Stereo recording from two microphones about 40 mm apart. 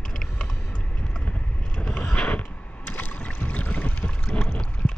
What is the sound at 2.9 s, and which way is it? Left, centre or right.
Boat, left.